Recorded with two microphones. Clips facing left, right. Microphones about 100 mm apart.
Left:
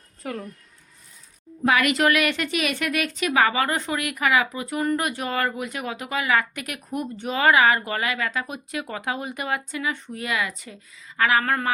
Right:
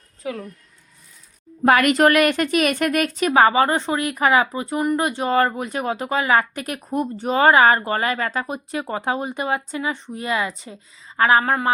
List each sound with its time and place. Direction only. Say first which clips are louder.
0.2 s speech: right 3 dB; centre (ahead or behind)
1.6 s a woman's voice: right 5 dB; 45° right (ahead or behind); by 11.5 s 30° right (ahead or behind)